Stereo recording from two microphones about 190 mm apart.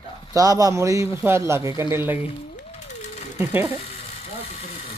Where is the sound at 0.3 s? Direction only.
20° right (ahead or behind).